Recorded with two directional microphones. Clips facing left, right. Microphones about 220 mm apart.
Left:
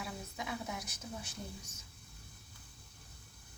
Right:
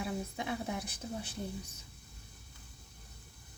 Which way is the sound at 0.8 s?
55° right (ahead or behind).